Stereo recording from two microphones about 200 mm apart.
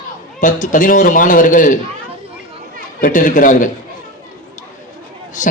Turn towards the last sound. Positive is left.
turn(degrees=40)  # may be behind; listen again after turning